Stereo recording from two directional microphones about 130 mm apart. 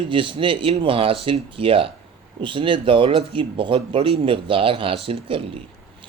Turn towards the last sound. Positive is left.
turn(degrees=-45)  # may be behind; listen again after turning